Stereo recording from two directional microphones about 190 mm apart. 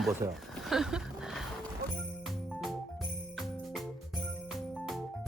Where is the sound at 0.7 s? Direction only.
Centre (ahead or behind).